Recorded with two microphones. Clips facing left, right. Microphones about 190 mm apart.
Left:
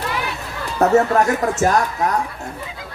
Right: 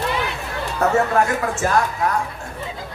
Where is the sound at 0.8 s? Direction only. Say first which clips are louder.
Left 4 dB; 40° left (ahead or behind).